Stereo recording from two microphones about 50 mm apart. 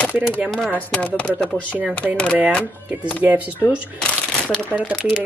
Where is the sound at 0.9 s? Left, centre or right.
Left.